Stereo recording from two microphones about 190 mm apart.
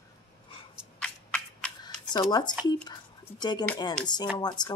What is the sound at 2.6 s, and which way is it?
A woman's voice, 20° left (ahead or behind).